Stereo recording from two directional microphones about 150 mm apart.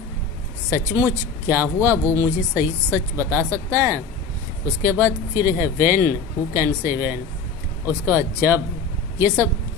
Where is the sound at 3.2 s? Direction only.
15° right (ahead or behind).